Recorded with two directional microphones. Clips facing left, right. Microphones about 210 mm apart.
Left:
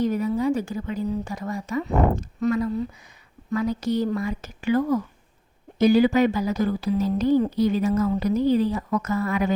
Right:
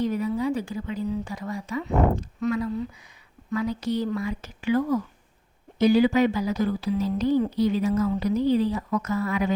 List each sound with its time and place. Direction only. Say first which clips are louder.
0.0 s speech: left 2 dB; 45° left (ahead or behind)